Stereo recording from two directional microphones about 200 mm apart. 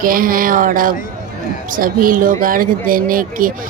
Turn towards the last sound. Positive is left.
turn(degrees=-45)  # may be behind; listen again after turning